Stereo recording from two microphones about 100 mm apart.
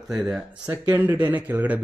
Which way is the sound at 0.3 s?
10° right (ahead or behind).